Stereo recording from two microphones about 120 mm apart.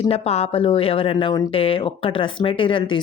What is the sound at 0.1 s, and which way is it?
Speech, 60° left (ahead or behind).